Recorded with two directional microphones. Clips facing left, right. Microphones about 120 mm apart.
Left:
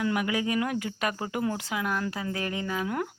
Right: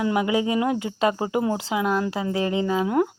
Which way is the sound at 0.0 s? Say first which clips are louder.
Right 6 dB; 25° right (ahead or behind).